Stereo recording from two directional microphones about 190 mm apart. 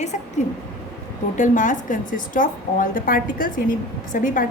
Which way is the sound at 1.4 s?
45° left (ahead or behind).